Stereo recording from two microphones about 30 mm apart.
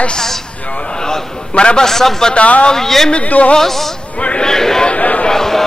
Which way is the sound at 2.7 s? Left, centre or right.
Centre.